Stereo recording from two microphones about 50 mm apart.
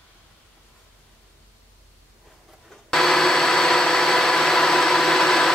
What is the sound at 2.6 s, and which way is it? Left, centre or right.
Vacuum cleaner, centre.